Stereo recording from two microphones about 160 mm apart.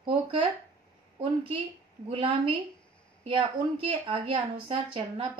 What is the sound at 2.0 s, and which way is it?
A woman's voice, 30° right (ahead or behind).